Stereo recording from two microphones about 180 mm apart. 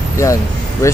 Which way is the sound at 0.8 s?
15° left (ahead or behind).